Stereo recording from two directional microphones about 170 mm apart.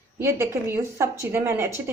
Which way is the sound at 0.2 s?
15° right (ahead or behind).